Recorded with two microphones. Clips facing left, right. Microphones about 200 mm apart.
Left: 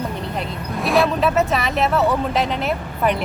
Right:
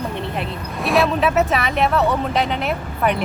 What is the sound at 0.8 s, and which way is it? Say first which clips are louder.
Speech: even; centre (ahead or behind).